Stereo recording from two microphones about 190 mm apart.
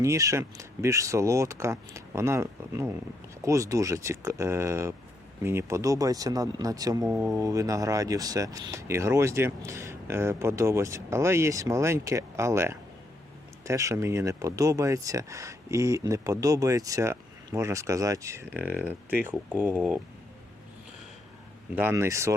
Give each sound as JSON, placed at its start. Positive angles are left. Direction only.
{"t": 0.0, "sound": "speech", "side_deg": -15}
{"t": 21.8, "sound": "speech", "side_deg": -10}